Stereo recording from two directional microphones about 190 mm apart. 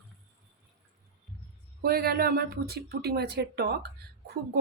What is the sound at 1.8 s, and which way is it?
Speech, 55° right (ahead or behind).